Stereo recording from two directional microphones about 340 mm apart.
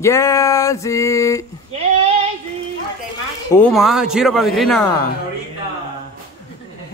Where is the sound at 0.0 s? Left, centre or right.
Centre.